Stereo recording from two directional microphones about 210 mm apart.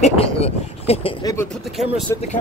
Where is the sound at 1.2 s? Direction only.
15° left (ahead or behind).